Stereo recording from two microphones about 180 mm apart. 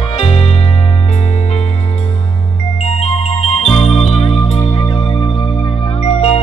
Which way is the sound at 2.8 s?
35° left (ahead or behind).